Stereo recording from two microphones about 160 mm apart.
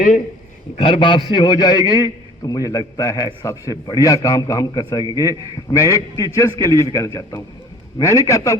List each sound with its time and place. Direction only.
0.8 s a man's voice: 30° left (ahead or behind)